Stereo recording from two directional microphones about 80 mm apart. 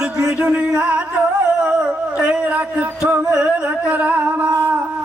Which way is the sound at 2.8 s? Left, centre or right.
Centre.